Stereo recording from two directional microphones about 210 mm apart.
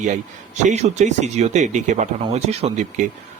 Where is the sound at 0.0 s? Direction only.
35° right (ahead or behind).